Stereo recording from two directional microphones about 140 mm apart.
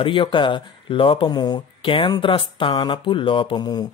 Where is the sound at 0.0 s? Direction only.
35° left (ahead or behind).